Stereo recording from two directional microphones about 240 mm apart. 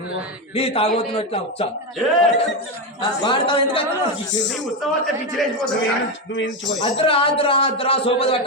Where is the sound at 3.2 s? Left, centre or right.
Left.